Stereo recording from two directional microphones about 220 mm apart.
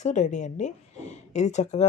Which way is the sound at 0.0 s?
35° left (ahead or behind).